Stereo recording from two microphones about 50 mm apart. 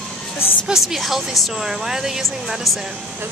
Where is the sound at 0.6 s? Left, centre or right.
Centre.